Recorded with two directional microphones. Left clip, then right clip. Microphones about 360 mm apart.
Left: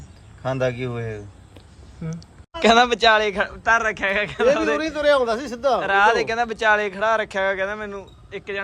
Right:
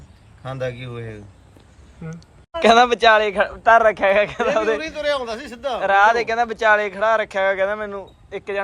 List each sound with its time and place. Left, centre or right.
0.4 s a man's voice: left
2.6 s speech: centre
4.7 s a man's voice: left
5.8 s speech: centre